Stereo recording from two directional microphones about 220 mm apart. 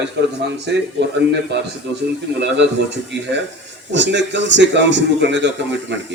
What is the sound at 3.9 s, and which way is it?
A man's voice, 55° right (ahead or behind).